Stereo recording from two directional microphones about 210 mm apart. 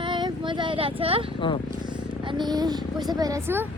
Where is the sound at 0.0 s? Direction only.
20° right (ahead or behind).